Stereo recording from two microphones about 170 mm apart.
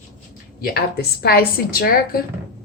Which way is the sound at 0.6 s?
70° left (ahead or behind).